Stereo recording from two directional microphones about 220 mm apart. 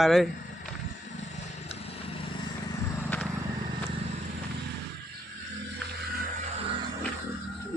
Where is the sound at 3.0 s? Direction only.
5° left (ahead or behind).